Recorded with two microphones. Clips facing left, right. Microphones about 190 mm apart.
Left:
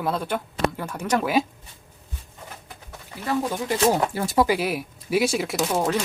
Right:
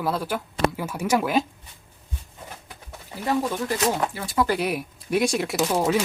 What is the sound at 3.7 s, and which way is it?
Speech, 30° left (ahead or behind).